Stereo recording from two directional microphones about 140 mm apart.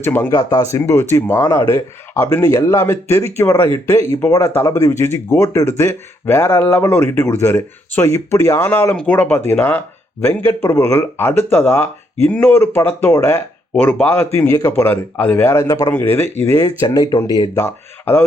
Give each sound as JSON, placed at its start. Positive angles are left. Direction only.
{"t": 0.0, "sound": "speech", "side_deg": 15}